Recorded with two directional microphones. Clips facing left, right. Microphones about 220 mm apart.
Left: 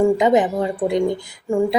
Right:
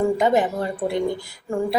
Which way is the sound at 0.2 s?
20° left (ahead or behind).